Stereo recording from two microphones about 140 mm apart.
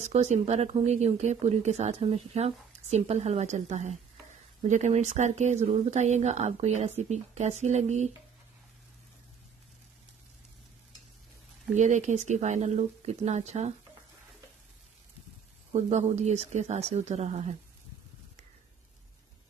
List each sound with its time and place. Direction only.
0.0 s speech: 50° right (ahead or behind)
11.7 s speech: 60° right (ahead or behind)
15.7 s speech: 55° right (ahead or behind)